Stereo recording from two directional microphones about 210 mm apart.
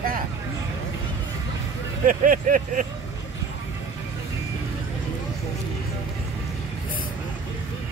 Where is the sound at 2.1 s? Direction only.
40° right (ahead or behind).